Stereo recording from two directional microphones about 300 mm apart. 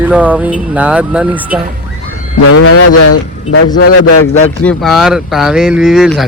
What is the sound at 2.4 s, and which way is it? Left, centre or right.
Speech, left.